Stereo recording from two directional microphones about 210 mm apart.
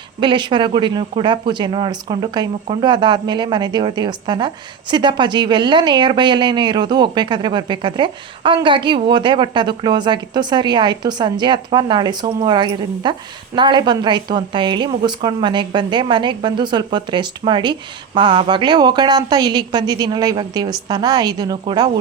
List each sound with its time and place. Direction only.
0.2 s speech: 20° right (ahead or behind)